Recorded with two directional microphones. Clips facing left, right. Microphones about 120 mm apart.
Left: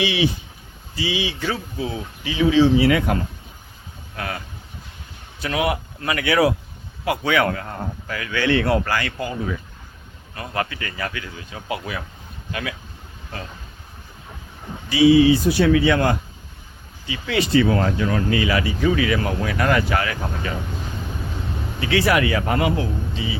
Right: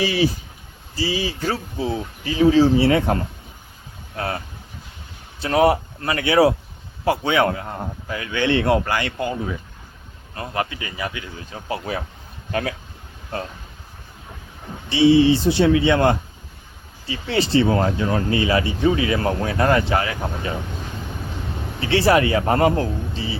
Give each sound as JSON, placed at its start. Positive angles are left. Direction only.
{"t": 0.0, "sound": "speech", "side_deg": -40}
{"t": 5.4, "sound": "speech", "side_deg": -35}
{"t": 11.3, "sound": "speech", "side_deg": -35}
{"t": 14.8, "sound": "speech", "side_deg": -30}
{"t": 21.8, "sound": "speech", "side_deg": -30}